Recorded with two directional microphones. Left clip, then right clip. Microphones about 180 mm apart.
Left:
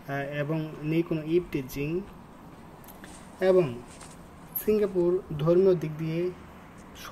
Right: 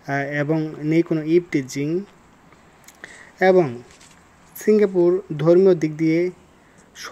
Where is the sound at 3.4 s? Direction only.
35° right (ahead or behind).